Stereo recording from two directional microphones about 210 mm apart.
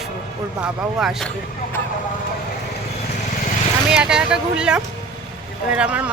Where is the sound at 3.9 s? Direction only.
5° right (ahead or behind).